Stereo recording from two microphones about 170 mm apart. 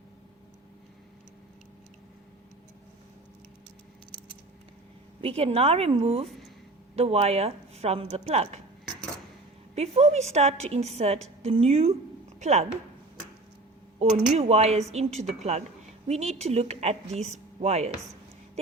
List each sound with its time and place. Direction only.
5.2 s a woman's voice: 35° right (ahead or behind)
9.7 s a woman's voice: 40° right (ahead or behind)
14.0 s a woman's voice: 40° right (ahead or behind)